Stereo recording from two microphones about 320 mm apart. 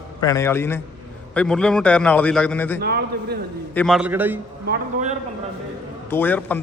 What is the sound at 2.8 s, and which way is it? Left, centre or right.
Speech, right.